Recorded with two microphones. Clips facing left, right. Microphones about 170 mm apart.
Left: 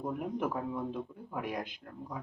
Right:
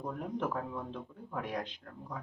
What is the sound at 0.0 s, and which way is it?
Speech, 10° left (ahead or behind).